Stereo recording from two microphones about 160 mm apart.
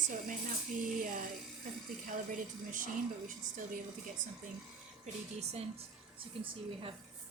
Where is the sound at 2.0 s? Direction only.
55° right (ahead or behind).